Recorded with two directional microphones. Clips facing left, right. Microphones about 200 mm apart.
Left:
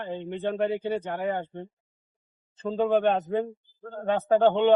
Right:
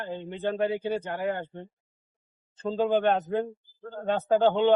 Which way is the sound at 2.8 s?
Centre (ahead or behind).